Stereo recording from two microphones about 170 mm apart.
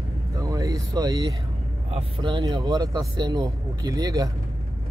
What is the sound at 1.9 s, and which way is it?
Speech, 30° right (ahead or behind).